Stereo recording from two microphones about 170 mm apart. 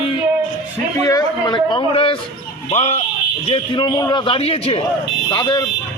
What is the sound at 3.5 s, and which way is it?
A man's voice, 25° left (ahead or behind).